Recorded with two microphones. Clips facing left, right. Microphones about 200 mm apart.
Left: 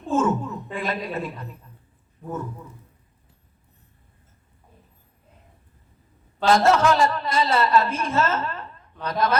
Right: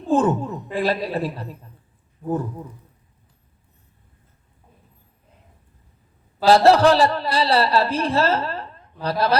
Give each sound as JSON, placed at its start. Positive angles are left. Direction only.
{"t": 0.1, "sound": "speech", "side_deg": -35}
{"t": 6.4, "sound": "a woman's voice", "side_deg": -35}